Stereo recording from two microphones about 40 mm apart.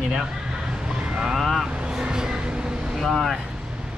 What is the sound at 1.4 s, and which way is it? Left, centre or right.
Speech, centre.